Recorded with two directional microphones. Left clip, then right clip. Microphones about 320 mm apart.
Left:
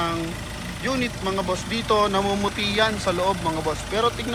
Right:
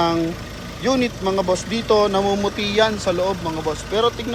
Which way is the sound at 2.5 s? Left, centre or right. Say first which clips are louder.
Right 4 dB; centre.